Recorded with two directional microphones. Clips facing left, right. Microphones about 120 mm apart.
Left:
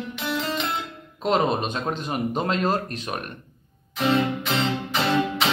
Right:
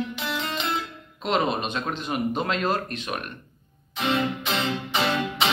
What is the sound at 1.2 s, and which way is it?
Speech, 40° left (ahead or behind).